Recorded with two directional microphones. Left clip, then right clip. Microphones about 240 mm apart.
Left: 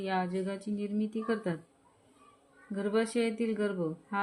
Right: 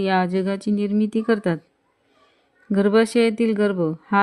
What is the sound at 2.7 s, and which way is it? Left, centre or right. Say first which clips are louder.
Speech: right 13 dB; right.